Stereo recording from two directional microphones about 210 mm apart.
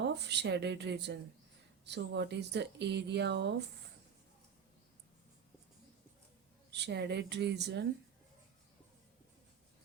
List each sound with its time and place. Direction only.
0.0 s speech: 55° right (ahead or behind)
6.7 s speech: 55° right (ahead or behind)